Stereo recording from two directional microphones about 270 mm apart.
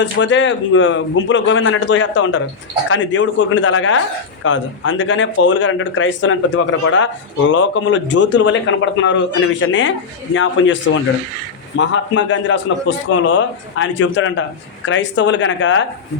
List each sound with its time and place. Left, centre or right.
0.0 s speech: left